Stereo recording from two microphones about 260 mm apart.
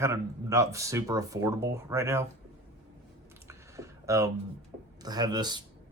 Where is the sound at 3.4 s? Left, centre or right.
Centre.